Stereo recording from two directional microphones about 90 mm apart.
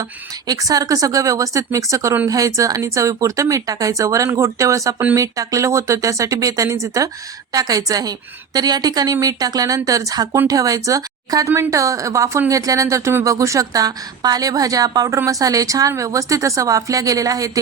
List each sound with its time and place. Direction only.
0.0 s a woman's voice: 40° right (ahead or behind)